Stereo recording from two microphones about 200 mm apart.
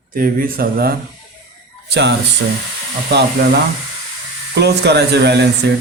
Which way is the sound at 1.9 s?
60° right (ahead or behind).